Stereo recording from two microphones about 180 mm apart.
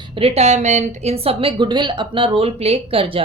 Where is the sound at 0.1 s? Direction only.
30° right (ahead or behind).